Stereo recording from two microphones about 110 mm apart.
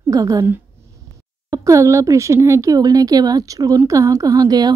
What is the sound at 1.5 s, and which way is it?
Speech, 30° right (ahead or behind).